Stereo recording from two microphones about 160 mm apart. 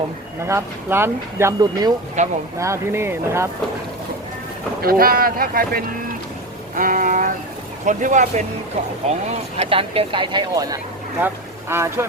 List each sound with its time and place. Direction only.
0.4 s speech: 15° right (ahead or behind)
2.2 s speech: 45° right (ahead or behind)
2.6 s speech: 15° right (ahead or behind)
4.8 s speech: 65° right (ahead or behind)
9.2 s speech: 40° right (ahead or behind); by 12.0 s 15° right (ahead or behind)